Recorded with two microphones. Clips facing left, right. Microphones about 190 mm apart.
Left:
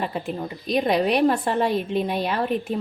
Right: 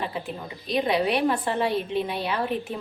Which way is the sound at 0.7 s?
45° left (ahead or behind).